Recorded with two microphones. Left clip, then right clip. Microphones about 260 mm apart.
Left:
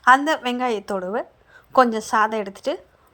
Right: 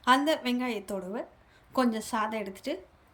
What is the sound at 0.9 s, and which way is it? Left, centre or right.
Speech, left.